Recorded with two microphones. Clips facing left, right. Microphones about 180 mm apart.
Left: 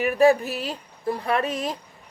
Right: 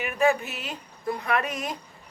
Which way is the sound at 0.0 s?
35° left (ahead or behind).